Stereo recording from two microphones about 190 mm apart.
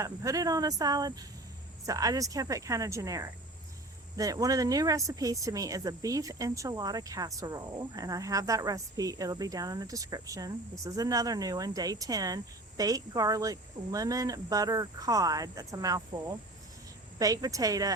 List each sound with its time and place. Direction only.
0.0 s speech: 15° right (ahead or behind)